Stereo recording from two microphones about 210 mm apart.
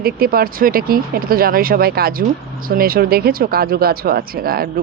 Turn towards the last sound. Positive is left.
turn(degrees=-45)  # may be behind; listen again after turning